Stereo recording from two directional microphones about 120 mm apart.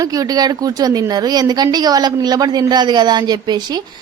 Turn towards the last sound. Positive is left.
turn(degrees=-35)  # may be behind; listen again after turning